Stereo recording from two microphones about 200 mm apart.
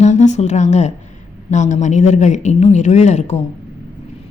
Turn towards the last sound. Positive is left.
turn(degrees=35)  # may be behind; listen again after turning